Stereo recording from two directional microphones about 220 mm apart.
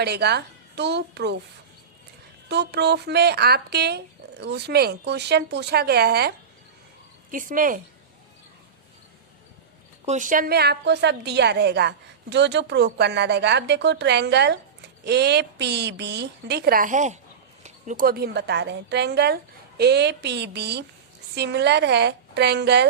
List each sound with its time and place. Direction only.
0.0 s a woman's voice: 50° right (ahead or behind)
2.5 s a woman's voice: 50° right (ahead or behind)
10.1 s a woman's voice: 35° right (ahead or behind)